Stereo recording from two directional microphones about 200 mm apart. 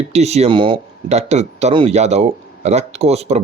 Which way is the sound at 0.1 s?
35° right (ahead or behind).